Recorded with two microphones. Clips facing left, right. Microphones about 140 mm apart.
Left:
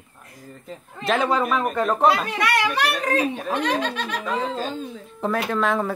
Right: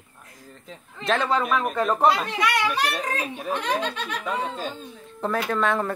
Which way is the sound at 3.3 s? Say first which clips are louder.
Left 3 dB; 80° left.